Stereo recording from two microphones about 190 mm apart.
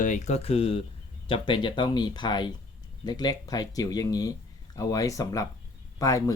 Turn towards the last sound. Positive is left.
turn(degrees=20)  # may be behind; listen again after turning